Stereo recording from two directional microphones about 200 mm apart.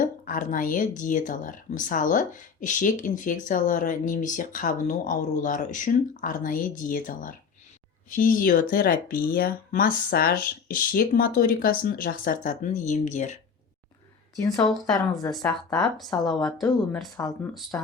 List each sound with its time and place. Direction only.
0.0 s speech: 40° left (ahead or behind)
14.4 s speech: 20° left (ahead or behind)
15.4 s speech: 5° left (ahead or behind)
17.2 s speech: 15° left (ahead or behind)